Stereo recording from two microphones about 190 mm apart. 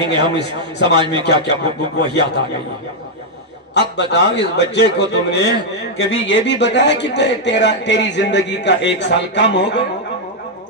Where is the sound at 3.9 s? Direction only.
65° left (ahead or behind).